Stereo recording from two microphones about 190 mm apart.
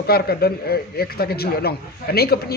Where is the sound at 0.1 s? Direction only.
55° left (ahead or behind).